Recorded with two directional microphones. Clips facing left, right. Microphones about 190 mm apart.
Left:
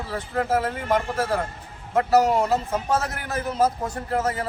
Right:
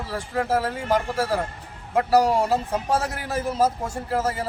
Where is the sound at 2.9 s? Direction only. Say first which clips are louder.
Right 1 dB; 10° right (ahead or behind).